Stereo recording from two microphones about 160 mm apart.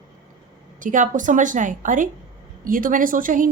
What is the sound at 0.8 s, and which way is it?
A woman's voice, 55° right (ahead or behind).